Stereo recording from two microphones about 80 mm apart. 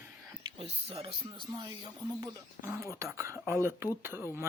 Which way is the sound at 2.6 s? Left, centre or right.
Right.